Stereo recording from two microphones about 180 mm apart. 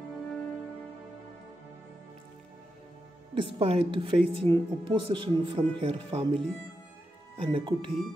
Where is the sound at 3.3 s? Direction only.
30° right (ahead or behind).